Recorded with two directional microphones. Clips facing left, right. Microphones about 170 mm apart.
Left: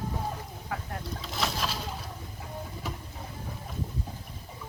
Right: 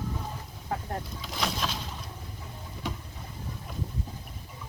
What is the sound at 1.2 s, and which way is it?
Boat, centre (ahead or behind).